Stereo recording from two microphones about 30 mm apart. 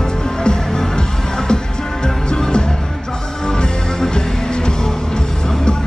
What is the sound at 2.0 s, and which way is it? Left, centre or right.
Music, left.